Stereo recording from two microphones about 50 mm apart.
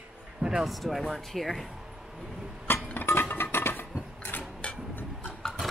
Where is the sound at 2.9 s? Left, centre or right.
Left.